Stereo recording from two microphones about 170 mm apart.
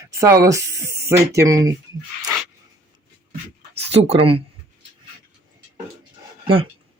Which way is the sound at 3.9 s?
35° right (ahead or behind).